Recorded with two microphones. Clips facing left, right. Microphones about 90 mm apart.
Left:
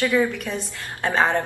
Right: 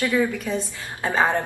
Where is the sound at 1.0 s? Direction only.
15° right (ahead or behind).